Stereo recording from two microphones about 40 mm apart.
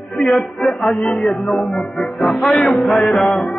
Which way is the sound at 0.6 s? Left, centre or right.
Centre.